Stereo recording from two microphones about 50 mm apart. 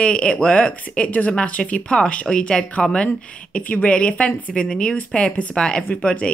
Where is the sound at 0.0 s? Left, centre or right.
Left.